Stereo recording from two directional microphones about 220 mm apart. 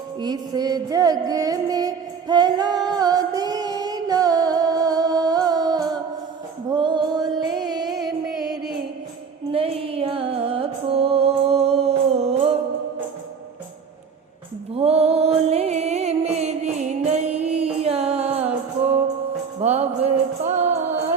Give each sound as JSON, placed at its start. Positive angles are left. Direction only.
{"t": 0.2, "sound": "music", "side_deg": -20}
{"t": 8.3, "sound": "music", "side_deg": 0}
{"t": 9.5, "sound": "music", "side_deg": -25}
{"t": 14.8, "sound": "music", "side_deg": -30}
{"t": 19.5, "sound": "music", "side_deg": -30}